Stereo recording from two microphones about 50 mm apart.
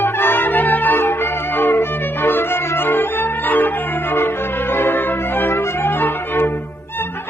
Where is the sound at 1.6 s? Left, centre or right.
Left.